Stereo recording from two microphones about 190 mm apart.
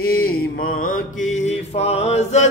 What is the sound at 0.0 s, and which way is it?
Mantra, 50° left (ahead or behind).